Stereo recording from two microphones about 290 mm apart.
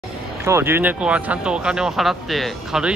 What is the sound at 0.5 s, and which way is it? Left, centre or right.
Speech, centre.